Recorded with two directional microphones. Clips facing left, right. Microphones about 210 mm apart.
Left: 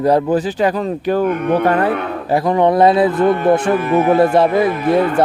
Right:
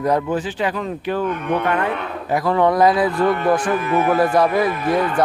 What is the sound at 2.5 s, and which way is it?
Speech, 20° left (ahead or behind).